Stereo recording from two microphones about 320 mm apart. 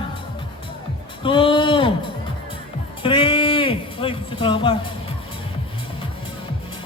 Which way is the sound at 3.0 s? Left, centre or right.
Centre.